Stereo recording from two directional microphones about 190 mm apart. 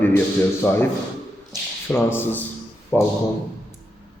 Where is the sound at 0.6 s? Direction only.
10° left (ahead or behind).